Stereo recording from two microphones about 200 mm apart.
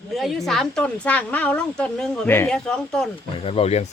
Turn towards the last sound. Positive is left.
turn(degrees=30)  # may be behind; listen again after turning